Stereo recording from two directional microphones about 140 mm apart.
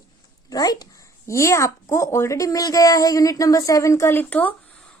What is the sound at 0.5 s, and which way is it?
A woman's voice, 25° left (ahead or behind).